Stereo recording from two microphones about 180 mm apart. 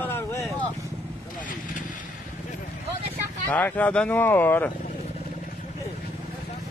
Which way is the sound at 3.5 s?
10° left (ahead or behind).